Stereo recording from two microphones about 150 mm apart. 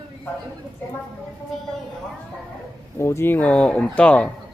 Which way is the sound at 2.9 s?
20° left (ahead or behind).